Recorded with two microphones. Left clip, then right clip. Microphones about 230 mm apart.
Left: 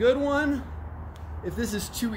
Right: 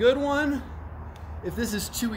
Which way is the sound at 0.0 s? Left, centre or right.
Centre.